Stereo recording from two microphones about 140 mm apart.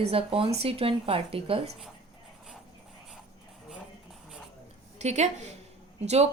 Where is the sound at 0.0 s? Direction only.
45° right (ahead or behind).